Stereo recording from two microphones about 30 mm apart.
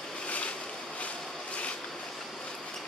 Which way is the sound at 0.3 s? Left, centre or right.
Left.